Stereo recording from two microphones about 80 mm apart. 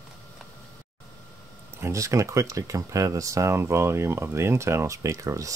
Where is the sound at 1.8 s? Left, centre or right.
Right.